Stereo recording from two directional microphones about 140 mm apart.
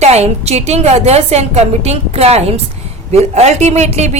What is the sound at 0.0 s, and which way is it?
A woman's voice, 50° right (ahead or behind).